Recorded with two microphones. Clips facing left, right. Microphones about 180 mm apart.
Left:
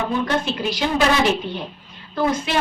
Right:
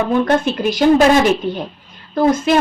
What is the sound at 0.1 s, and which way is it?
A woman's voice, 50° right (ahead or behind).